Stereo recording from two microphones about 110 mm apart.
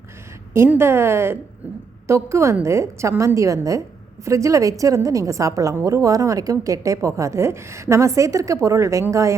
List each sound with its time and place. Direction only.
0.8 s a woman's voice: 20° right (ahead or behind)